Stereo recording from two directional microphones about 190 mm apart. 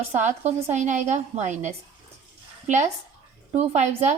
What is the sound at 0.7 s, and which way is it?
A woman's voice, 40° right (ahead or behind).